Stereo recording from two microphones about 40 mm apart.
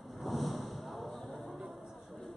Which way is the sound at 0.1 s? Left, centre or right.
Centre.